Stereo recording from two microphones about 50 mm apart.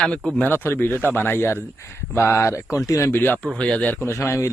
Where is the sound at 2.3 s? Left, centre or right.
Left.